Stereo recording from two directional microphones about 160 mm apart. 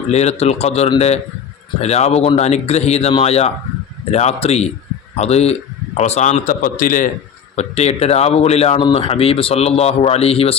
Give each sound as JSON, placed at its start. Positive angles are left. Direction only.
{"t": 0.1, "sound": "a man's voice", "side_deg": 40}
{"t": 7.5, "sound": "speech", "side_deg": 45}